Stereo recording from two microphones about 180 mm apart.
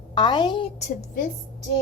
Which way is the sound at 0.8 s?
50° left (ahead or behind).